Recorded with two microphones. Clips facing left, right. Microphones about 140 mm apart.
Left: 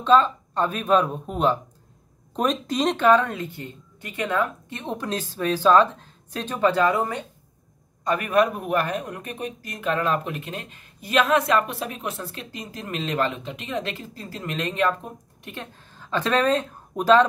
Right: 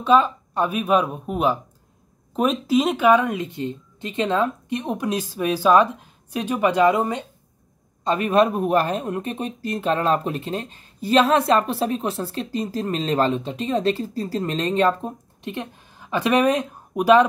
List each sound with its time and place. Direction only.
0.0 s speech: 10° right (ahead or behind)